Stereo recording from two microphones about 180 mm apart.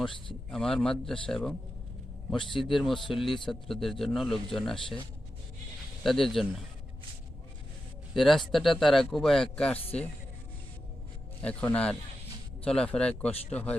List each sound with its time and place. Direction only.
0.5 s a man's voice: 5° left (ahead or behind)
2.6 s a man's voice: centre (ahead or behind)
6.0 s a man's voice: centre (ahead or behind)
8.1 s a man's voice: centre (ahead or behind)
9.7 s speech: 30° left (ahead or behind)
11.4 s a man's voice: 5° left (ahead or behind)